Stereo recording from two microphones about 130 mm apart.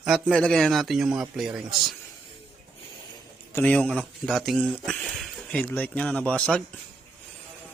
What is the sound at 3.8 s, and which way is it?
Speech, centre (ahead or behind).